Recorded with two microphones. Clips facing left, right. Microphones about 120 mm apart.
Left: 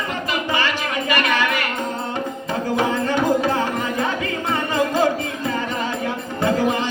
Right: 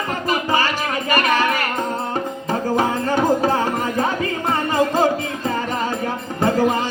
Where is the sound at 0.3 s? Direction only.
40° right (ahead or behind).